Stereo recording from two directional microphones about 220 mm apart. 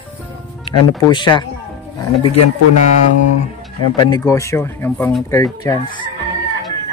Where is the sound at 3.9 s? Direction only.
20° left (ahead or behind).